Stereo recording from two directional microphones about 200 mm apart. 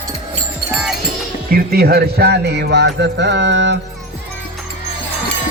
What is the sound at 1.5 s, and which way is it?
Speech, 50° right (ahead or behind).